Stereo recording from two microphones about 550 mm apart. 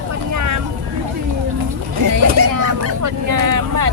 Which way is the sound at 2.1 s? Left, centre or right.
Right.